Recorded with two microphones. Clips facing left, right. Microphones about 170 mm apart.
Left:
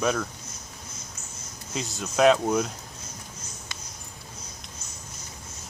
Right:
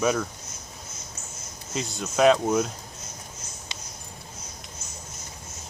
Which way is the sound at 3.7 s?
20° right (ahead or behind).